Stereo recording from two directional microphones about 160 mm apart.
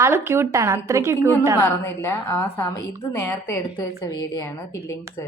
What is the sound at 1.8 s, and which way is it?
A woman's voice, 15° left (ahead or behind).